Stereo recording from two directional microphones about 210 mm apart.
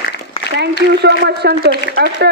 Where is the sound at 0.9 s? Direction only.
50° right (ahead or behind).